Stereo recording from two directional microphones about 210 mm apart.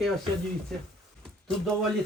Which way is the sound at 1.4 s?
Centre (ahead or behind).